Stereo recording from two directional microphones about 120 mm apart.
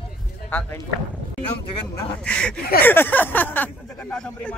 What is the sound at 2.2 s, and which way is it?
Speech, 10° left (ahead or behind).